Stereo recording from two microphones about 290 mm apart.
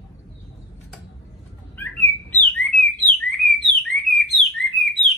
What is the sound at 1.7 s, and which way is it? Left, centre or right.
Bird, centre.